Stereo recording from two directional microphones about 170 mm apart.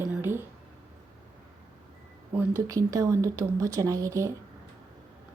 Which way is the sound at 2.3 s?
15° right (ahead or behind).